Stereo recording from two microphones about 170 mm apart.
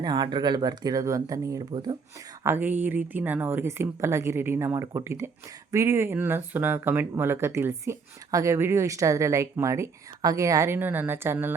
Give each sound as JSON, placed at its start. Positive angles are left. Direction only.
{"t": 0.0, "sound": "speech", "side_deg": -25}
{"t": 2.4, "sound": "speech", "side_deg": -15}